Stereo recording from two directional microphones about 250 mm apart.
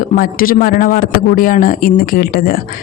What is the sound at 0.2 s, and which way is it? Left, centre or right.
A woman's voice, left.